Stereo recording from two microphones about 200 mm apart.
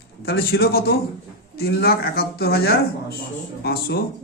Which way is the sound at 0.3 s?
50° left (ahead or behind).